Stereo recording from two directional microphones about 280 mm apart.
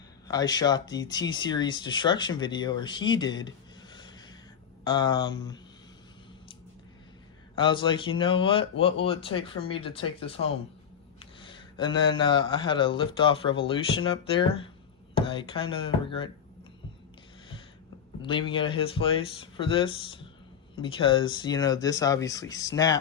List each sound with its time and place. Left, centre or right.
0.3 s speech: centre
4.8 s speech: centre
7.5 s speech: centre
18.2 s speech: centre